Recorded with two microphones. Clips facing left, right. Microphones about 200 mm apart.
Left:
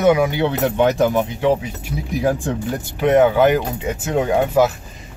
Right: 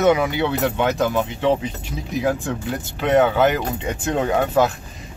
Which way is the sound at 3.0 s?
10° left (ahead or behind).